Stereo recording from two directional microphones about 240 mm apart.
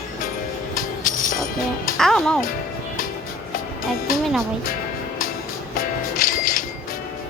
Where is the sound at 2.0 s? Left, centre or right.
Centre.